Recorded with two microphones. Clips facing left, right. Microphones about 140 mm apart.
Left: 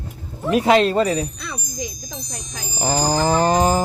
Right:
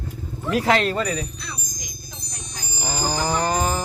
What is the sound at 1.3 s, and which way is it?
Chime, 55° left (ahead or behind).